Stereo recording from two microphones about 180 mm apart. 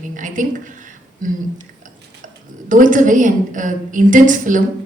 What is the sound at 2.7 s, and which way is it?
A woman's voice, 45° right (ahead or behind).